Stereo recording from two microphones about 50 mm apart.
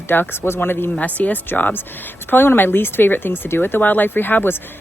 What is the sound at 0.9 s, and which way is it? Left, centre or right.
Speech, left.